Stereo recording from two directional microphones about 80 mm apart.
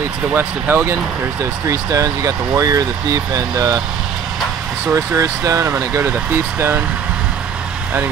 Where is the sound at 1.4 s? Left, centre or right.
Right.